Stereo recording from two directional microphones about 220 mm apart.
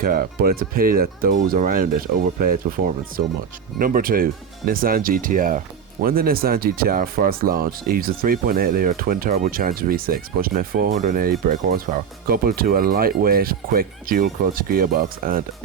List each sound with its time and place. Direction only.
0.0 s speech: 40° right (ahead or behind)